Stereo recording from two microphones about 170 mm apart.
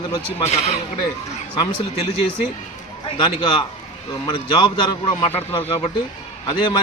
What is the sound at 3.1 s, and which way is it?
Speech, 25° left (ahead or behind).